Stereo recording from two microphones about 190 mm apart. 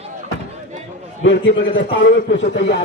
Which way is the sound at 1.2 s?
80° left.